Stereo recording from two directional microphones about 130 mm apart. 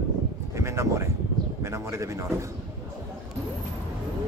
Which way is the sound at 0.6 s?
20° right (ahead or behind).